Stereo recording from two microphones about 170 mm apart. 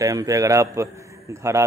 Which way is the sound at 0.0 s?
20° right (ahead or behind).